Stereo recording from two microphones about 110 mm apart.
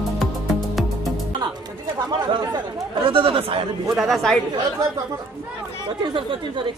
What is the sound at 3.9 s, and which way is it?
Speech, centre (ahead or behind).